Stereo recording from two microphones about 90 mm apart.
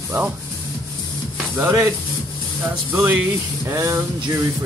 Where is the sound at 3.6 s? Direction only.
35° right (ahead or behind).